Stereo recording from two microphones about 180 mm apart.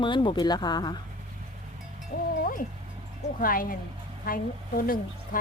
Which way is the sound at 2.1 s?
65° left (ahead or behind).